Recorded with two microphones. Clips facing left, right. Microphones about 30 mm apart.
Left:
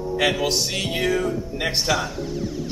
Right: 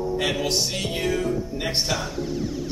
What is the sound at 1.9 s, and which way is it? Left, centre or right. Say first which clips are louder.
Speech: left 2 dB; centre.